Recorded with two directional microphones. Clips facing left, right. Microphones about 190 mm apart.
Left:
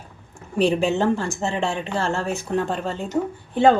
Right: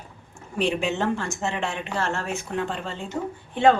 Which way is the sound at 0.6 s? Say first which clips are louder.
Left 5 dB; 35° left (ahead or behind).